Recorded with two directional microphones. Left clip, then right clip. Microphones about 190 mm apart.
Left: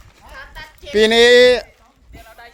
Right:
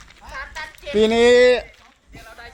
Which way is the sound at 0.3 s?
55° left (ahead or behind).